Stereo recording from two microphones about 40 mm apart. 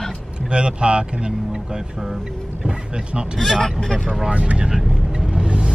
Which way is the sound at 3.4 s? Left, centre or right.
Centre.